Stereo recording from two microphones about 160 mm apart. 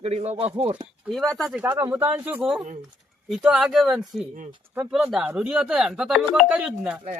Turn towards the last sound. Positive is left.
turn(degrees=-5)  # may be behind; listen again after turning